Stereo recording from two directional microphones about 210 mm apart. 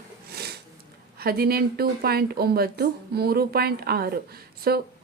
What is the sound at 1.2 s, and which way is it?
A woman's voice, 45° right (ahead or behind).